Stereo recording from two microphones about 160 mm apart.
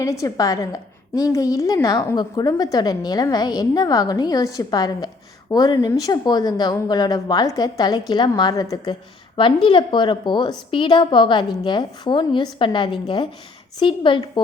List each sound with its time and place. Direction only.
0.0 s a woman's voice: 20° left (ahead or behind)